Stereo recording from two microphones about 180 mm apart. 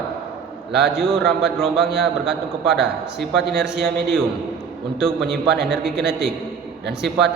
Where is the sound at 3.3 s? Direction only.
65° right (ahead or behind).